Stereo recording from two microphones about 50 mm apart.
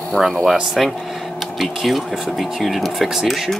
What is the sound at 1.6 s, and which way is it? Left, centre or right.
Speech, centre.